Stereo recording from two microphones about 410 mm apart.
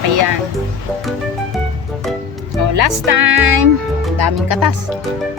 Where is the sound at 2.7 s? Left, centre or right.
Right.